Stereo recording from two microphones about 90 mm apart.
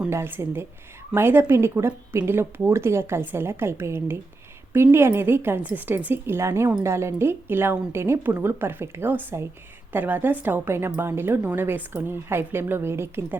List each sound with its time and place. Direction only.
0.1 s a woman's voice: 30° right (ahead or behind)